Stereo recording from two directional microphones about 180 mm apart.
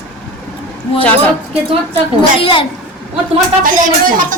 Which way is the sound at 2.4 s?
30° left (ahead or behind).